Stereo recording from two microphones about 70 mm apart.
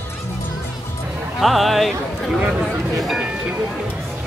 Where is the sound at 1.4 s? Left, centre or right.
Centre.